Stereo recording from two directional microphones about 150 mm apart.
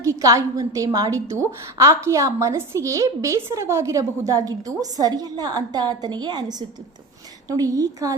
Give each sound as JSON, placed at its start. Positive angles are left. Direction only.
{"t": 0.0, "sound": "a woman's voice", "side_deg": -20}